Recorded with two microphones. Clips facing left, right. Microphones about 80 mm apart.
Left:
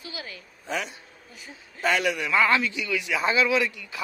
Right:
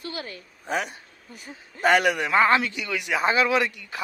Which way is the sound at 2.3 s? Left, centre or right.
Right.